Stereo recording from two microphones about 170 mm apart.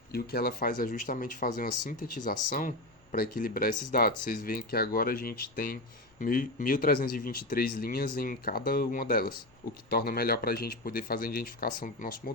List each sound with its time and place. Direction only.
0.1 s speech: 65° left (ahead or behind)